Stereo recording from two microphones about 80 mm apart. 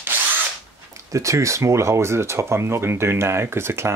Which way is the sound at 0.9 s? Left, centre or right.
Right.